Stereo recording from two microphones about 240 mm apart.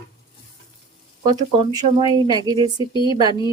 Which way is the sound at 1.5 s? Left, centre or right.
Centre.